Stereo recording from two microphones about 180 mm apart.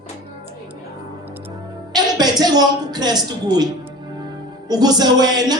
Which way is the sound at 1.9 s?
20° right (ahead or behind).